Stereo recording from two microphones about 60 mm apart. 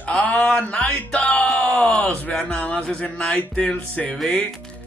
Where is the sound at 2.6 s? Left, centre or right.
Left.